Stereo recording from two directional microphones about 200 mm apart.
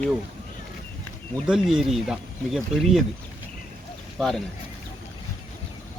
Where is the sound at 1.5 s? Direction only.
Centre (ahead or behind).